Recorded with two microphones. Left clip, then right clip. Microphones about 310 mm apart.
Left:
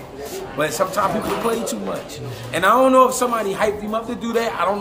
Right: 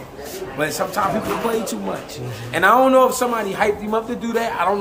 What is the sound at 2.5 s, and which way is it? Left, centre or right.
A man's voice, centre.